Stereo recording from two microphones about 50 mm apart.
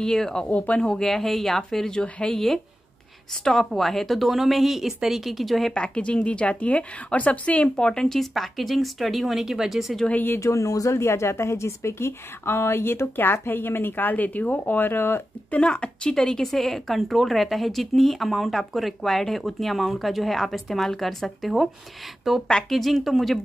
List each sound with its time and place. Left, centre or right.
0.0 s speech: centre
0.5 s speech: left
0.8 s speech: centre
3.4 s speech: centre
5.7 s speech: left
7.6 s speech: centre
8.2 s speech: centre
10.4 s speech: left
15.5 s speech: left; by 23.4 s centre